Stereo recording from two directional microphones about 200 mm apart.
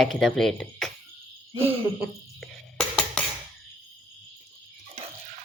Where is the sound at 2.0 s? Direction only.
Centre (ahead or behind).